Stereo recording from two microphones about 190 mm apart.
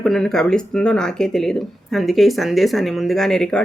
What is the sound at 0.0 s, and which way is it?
Speech, 5° left (ahead or behind).